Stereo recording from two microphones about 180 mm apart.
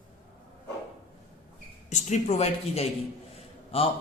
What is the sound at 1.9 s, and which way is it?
A man's voice, 40° left (ahead or behind).